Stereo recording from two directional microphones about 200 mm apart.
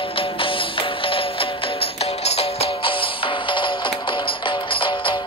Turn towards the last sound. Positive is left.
turn(degrees=25)  # may be behind; listen again after turning